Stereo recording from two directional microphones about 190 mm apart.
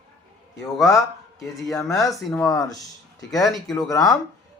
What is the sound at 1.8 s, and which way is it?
Speech, 15° left (ahead or behind).